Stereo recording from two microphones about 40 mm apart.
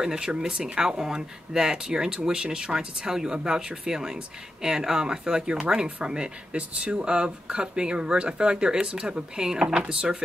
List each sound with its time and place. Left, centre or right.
0.0 s speech: centre